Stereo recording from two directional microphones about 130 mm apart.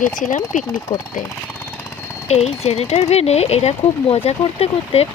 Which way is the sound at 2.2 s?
55° left (ahead or behind).